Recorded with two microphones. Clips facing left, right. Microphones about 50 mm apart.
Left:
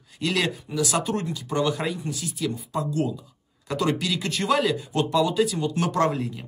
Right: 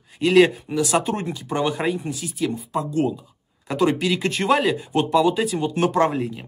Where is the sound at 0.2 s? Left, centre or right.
Right.